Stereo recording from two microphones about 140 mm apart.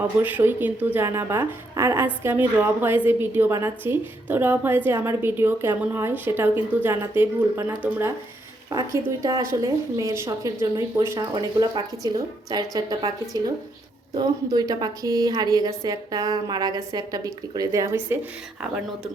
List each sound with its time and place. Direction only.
0.0 s a woman's voice: 10° right (ahead or behind)